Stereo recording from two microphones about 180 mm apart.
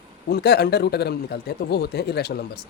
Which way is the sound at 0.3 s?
65° left (ahead or behind).